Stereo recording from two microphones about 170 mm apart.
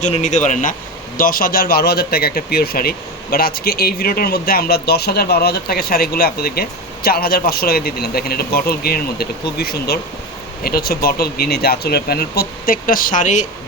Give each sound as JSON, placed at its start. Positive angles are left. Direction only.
{"t": 0.0, "sound": "speech", "side_deg": 45}